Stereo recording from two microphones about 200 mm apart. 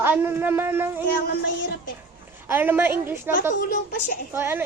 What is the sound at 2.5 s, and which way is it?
Speech, 10° right (ahead or behind).